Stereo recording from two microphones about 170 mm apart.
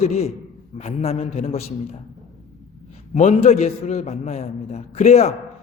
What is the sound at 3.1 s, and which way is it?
A man's voice, 40° left (ahead or behind).